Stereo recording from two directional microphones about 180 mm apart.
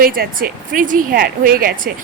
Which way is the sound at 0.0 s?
50° right (ahead or behind).